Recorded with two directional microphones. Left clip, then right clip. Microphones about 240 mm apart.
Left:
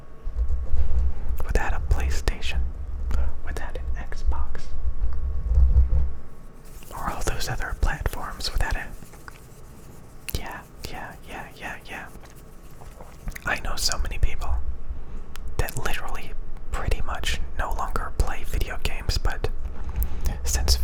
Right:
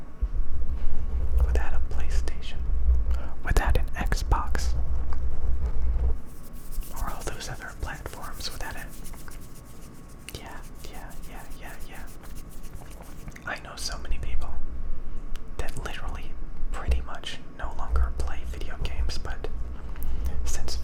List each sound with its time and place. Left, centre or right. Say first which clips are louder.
1.4 s whispering: left 7 dB; left
3.4 s whispering: right 10 dB; centre
6.9 s whispering: left 6 dB; left
13.2 s whispering: left 7 dB; left
15.5 s whispering: left 7 dB; centre